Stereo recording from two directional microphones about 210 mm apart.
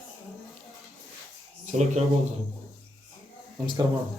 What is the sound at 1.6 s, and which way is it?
Speech, 35° right (ahead or behind).